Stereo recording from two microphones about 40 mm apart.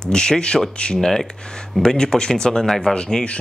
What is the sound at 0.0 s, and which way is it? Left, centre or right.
Speech, centre.